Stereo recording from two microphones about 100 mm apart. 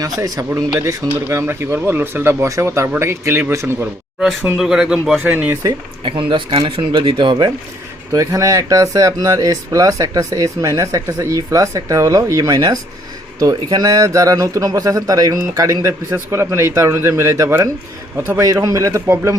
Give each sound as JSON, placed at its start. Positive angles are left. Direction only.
{"t": 0.0, "sound": "speech", "side_deg": -35}
{"t": 4.5, "sound": "speech", "side_deg": -5}
{"t": 5.2, "sound": "speech", "side_deg": -20}
{"t": 6.0, "sound": "speech", "side_deg": -60}
{"t": 8.1, "sound": "speech", "side_deg": -35}